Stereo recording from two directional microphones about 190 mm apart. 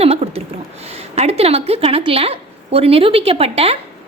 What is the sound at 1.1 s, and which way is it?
A woman's voice, 35° right (ahead or behind).